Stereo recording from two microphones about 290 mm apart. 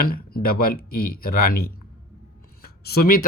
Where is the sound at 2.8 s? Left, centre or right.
Left.